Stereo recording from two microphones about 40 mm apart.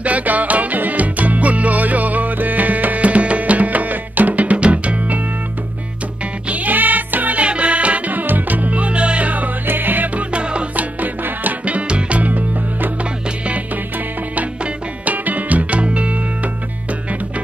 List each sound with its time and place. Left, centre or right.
0.0 s music: right
6.5 s music: right
7.4 s music: right
9.7 s music: right
10.1 s music: right
15.0 s music: right